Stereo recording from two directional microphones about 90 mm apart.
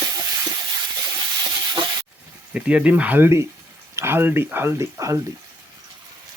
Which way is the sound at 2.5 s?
15° right (ahead or behind).